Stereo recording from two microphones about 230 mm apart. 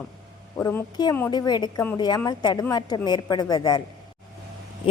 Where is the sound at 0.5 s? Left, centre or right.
Centre.